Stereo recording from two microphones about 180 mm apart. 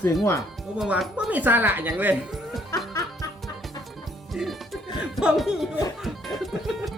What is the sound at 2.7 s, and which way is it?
Music, 20° left (ahead or behind).